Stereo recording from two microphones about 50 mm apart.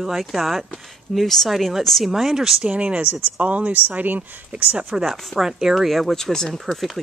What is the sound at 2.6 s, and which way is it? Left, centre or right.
Speech, right.